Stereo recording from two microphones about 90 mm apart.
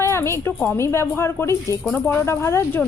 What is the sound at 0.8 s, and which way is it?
A woman's voice, 30° left (ahead or behind).